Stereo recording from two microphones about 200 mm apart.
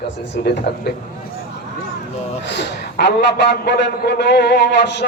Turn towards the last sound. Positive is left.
turn(degrees=60)  # may be behind; listen again after turning